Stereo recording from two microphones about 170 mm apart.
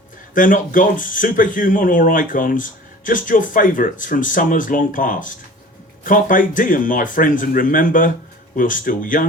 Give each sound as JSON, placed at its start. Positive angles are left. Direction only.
{"t": 0.3, "sound": "speech", "side_deg": 50}